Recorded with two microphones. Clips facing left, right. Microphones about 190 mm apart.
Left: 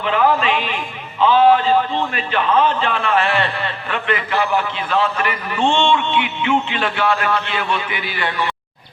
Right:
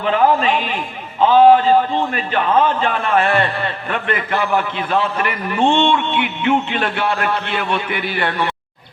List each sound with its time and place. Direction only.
0.0 s a man's voice: 45° right (ahead or behind)
1.2 s a sound: 45° right (ahead or behind)
2.1 s a man's voice: 45° right (ahead or behind)